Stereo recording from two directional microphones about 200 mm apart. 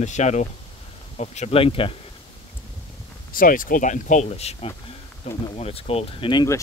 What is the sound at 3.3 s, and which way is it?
Speech, 45° left (ahead or behind).